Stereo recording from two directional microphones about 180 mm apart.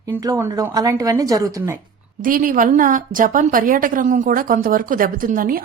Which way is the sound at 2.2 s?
50° right (ahead or behind).